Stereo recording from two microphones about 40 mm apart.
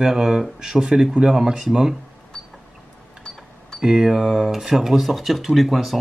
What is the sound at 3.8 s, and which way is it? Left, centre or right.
Speech, centre.